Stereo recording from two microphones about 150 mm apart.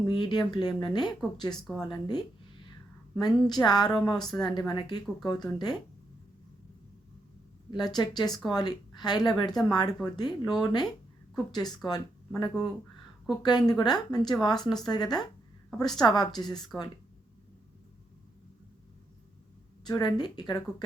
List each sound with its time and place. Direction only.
0.0 s speech: 30° left (ahead or behind)
1.6 s speech: centre (ahead or behind)
1.9 s speech: 30° left (ahead or behind)
7.7 s speech: 30° left (ahead or behind)
19.8 s speech: 30° left (ahead or behind)